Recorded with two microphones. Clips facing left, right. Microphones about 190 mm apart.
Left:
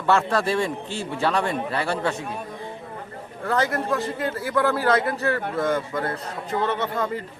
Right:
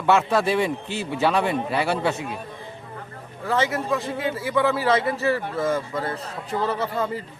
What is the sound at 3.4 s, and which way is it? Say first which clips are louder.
A man's voice: even; 5° right (ahead or behind).